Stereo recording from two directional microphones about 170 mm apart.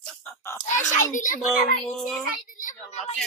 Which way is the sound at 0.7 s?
45° left (ahead or behind).